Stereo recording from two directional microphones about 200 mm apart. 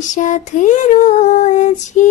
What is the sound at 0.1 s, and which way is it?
Female singing, 40° left (ahead or behind).